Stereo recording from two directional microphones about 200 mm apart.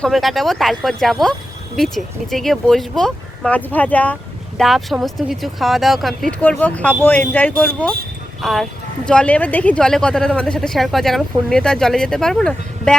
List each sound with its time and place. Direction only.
0.0 s speech: centre (ahead or behind)